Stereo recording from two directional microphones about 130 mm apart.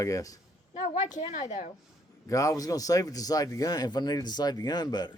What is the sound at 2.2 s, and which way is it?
A man's voice, 25° left (ahead or behind).